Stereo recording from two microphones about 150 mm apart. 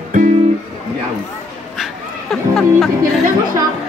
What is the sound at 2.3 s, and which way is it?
Music, 5° left (ahead or behind).